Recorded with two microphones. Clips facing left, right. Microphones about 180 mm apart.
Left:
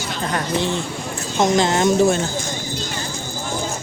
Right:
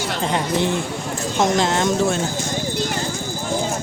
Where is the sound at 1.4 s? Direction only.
Centre (ahead or behind).